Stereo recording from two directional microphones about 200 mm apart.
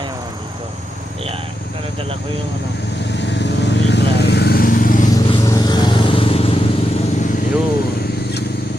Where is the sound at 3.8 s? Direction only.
60° left (ahead or behind).